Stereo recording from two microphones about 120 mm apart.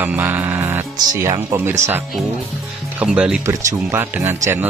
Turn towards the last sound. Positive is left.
turn(degrees=-20)  # may be behind; listen again after turning